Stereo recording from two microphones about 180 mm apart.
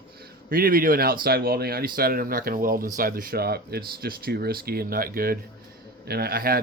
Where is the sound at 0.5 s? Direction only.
55° right (ahead or behind).